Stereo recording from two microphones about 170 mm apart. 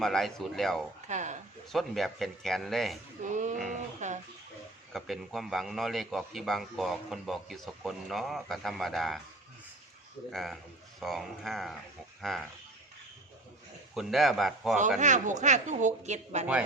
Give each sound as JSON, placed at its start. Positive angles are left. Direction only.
{"t": 0.0, "sound": "a man's voice", "side_deg": 0}
{"t": 1.0, "sound": "speech", "side_deg": -45}
{"t": 1.7, "sound": "a man's voice", "side_deg": 0}
{"t": 3.2, "sound": "a woman's voice", "side_deg": -50}
{"t": 4.9, "sound": "a man's voice", "side_deg": 0}
{"t": 10.3, "sound": "a man's voice", "side_deg": 0}
{"t": 13.9, "sound": "a man's voice", "side_deg": 0}
{"t": 14.9, "sound": "a woman's voice", "side_deg": -45}